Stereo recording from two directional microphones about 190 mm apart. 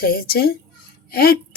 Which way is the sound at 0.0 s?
50° left (ahead or behind).